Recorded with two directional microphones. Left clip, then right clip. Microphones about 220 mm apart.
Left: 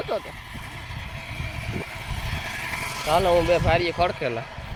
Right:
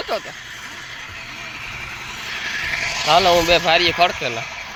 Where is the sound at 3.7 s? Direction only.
5° left (ahead or behind).